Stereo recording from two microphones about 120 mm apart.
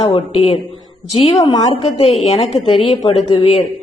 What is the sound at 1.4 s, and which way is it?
Speech, 40° left (ahead or behind).